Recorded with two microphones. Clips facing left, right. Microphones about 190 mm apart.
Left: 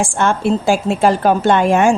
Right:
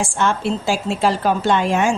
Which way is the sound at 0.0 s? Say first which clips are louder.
Left 4 dB; 50° left (ahead or behind).